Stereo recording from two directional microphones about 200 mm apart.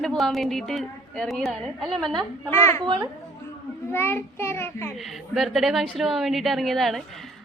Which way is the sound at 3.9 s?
10° left (ahead or behind).